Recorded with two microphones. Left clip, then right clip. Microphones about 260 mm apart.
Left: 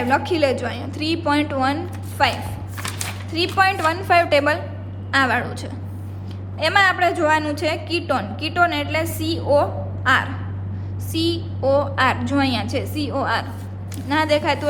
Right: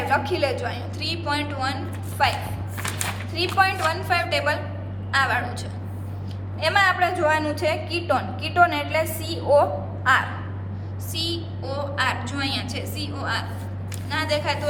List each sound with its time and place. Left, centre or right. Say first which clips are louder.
0.1 s a woman's voice: left 4 dB; left
3.3 s a woman's voice: left 3 dB; left
6.6 s a woman's voice: left 3 dB; left